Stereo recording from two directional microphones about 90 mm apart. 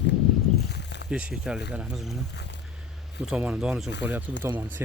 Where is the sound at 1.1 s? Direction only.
10° right (ahead or behind).